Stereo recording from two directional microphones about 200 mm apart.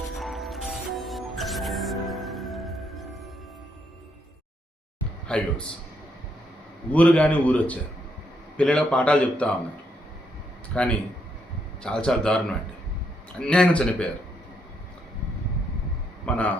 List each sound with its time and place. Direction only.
0.1 s music: centre (ahead or behind)
5.3 s a man's voice: 5° left (ahead or behind)
6.9 s speech: 5° left (ahead or behind)
10.7 s speech: 5° left (ahead or behind)
16.2 s a sound: 5° left (ahead or behind)